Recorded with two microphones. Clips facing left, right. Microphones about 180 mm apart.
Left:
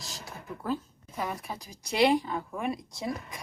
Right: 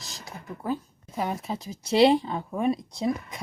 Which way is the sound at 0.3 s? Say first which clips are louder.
Right 2 dB; 15° right (ahead or behind).